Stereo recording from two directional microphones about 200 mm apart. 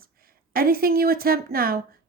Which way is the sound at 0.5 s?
50° right (ahead or behind).